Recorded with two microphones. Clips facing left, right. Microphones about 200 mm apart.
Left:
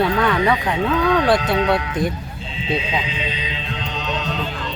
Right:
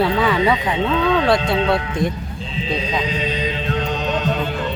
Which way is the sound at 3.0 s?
45° right (ahead or behind).